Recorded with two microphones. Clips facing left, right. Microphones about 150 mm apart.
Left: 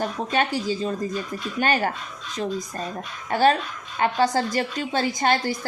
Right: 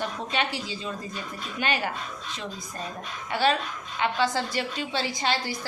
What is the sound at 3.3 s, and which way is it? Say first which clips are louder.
A woman's voice: left 5 dB; 45° left (ahead or behind).